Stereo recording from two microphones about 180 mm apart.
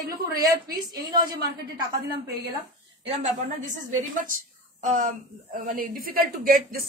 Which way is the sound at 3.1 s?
40° right (ahead or behind).